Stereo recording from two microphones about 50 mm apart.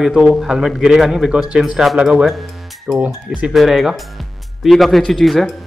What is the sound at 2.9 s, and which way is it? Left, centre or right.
Speech, right.